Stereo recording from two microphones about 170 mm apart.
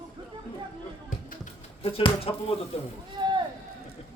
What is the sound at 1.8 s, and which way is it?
Speech, 35° left (ahead or behind).